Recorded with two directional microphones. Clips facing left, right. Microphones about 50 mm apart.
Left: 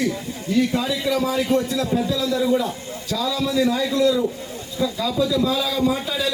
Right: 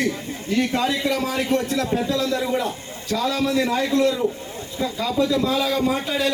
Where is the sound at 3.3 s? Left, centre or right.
Right.